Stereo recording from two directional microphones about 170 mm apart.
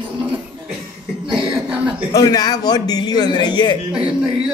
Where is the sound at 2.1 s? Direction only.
25° left (ahead or behind).